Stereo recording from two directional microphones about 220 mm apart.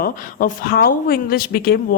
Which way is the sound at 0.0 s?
40° left (ahead or behind).